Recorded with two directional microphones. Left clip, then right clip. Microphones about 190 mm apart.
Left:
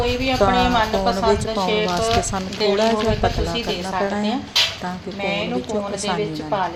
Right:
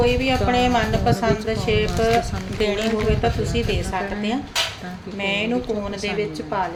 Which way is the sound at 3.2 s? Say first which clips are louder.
Left 1 dB; 20° right (ahead or behind).